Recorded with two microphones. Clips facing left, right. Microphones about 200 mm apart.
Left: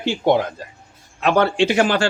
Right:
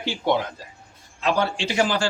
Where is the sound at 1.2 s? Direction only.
65° left (ahead or behind).